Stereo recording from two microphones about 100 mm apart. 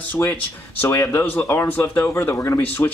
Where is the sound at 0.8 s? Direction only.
25° left (ahead or behind).